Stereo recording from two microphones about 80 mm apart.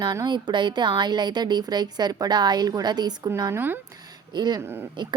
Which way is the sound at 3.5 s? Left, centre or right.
Right.